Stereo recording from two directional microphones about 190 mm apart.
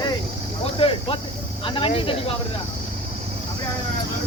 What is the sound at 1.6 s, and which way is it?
Snake, 25° left (ahead or behind).